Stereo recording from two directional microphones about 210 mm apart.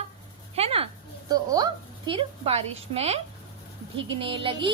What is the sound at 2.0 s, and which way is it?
A woman's voice, 25° right (ahead or behind).